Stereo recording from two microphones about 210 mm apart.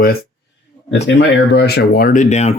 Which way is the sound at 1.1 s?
55° left (ahead or behind).